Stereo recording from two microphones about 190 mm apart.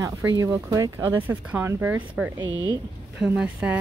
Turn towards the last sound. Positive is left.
turn(degrees=-5)  # may be behind; listen again after turning